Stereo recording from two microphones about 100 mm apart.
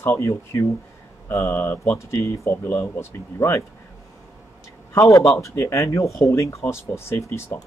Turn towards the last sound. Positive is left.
turn(degrees=30)  # may be behind; listen again after turning